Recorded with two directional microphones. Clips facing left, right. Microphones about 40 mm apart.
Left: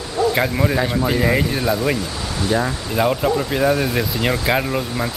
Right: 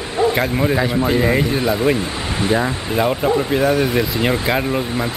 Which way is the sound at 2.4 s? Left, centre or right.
Right.